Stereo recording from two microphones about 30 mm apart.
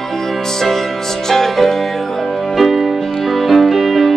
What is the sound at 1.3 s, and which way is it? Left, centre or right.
Music, centre.